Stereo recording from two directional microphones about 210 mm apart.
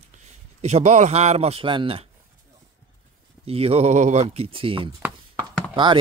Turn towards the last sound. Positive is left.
turn(degrees=-20)  # may be behind; listen again after turning